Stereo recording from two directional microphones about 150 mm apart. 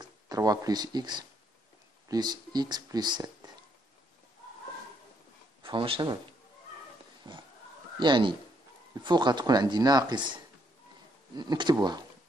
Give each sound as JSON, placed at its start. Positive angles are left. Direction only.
{"t": 0.0, "sound": "speech", "side_deg": -25}
{"t": 5.6, "sound": "speech", "side_deg": -35}
{"t": 7.2, "sound": "a sound", "side_deg": -30}
{"t": 8.0, "sound": "speech", "side_deg": -30}